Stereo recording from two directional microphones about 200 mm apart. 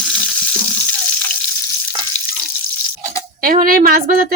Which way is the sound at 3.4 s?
45° right (ahead or behind).